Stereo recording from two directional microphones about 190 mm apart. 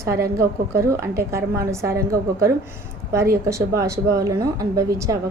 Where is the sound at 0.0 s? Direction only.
15° right (ahead or behind).